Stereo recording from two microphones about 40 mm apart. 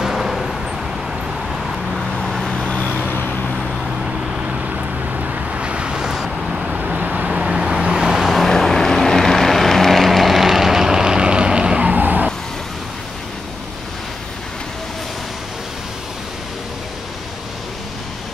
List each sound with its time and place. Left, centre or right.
0.0 s vehicle: centre
2.0 s vehicle: centre
2.7 s vehicle: left
4.4 s vehicle: right; by 6.8 s centre
7.0 s vehicle: right
7.4 s vehicle: centre
8.3 s vehicle: centre; by 11.8 s right
11.8 s skidding: right